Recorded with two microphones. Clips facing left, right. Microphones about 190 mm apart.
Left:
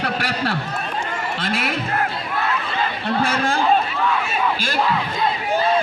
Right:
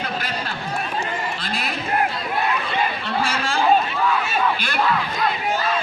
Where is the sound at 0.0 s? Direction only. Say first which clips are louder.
Left 4 dB; 75° left (ahead or behind).